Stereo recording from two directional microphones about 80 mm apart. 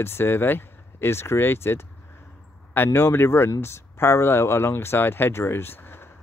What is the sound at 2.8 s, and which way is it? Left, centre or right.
Speech, left.